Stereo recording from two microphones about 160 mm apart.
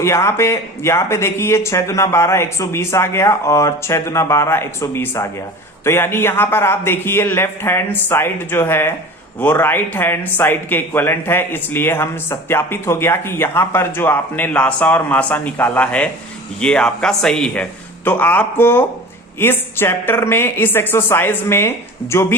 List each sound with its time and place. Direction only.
0.0 s speech: 15° left (ahead or behind)